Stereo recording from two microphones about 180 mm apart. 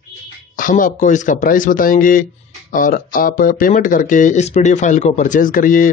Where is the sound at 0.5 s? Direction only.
50° left (ahead or behind).